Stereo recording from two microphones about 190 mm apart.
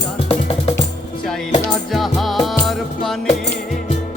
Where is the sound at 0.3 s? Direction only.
30° left (ahead or behind).